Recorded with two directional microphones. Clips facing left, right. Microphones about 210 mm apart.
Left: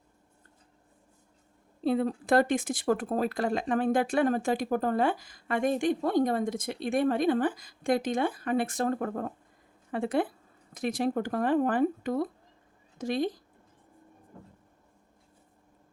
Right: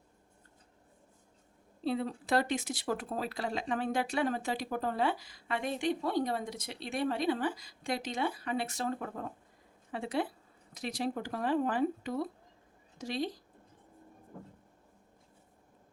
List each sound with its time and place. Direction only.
1.8 s speech: 50° left (ahead or behind)